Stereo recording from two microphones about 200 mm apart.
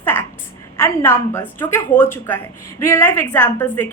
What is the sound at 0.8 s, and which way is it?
A woman's voice, 10° left (ahead or behind).